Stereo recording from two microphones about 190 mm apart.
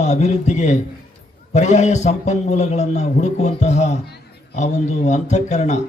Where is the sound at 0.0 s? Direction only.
35° left (ahead or behind).